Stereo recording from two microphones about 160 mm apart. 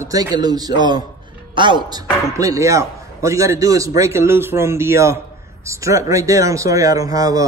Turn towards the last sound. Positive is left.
turn(degrees=-20)  # may be behind; listen again after turning